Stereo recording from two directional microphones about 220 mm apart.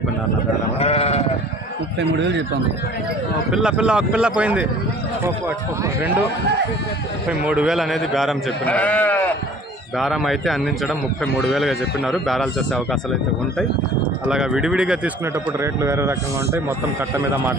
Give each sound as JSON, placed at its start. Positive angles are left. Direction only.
{"t": 0.8, "sound": "sheep", "side_deg": 30}
{"t": 3.5, "sound": "speech", "side_deg": -5}
{"t": 7.3, "sound": "speech", "side_deg": -5}
{"t": 14.3, "sound": "speech", "side_deg": -5}